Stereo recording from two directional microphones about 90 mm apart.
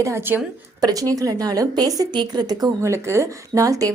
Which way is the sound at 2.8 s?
30° right (ahead or behind).